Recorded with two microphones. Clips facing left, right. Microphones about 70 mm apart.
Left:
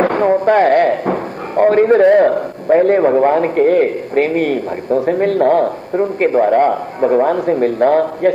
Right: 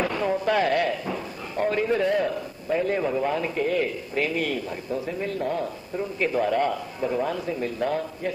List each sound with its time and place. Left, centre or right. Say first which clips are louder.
0.0 s speech: left 12 dB; left